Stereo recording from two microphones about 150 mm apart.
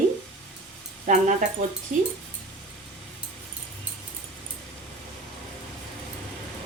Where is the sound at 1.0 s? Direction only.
55° right (ahead or behind).